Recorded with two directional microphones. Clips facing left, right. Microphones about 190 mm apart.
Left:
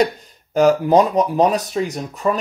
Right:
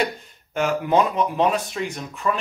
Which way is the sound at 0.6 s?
35° left (ahead or behind).